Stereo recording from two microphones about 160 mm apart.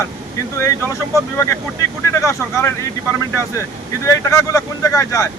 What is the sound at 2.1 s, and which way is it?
Speech, 20° left (ahead or behind).